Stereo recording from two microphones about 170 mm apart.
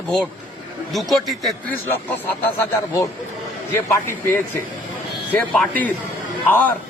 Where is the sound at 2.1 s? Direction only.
10° left (ahead or behind).